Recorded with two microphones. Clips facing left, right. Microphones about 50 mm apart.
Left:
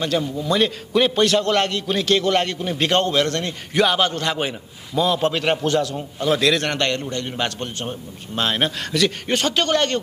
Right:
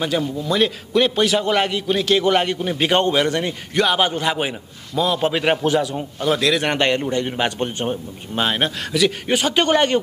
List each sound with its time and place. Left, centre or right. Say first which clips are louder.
0.2 s a man's voice: right 1 dB; centre
3.7 s a man's voice: even; centre
4.0 s a man's voice: right 2 dB; centre
5.3 s a man's voice: right 2 dB; centre
6.1 s a man's voice: even; centre
6.6 s a man's voice: right 3 dB; centre
8.5 s a man's voice: left 1 dB; centre